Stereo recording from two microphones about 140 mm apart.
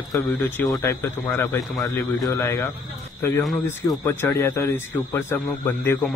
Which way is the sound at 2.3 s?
25° left (ahead or behind).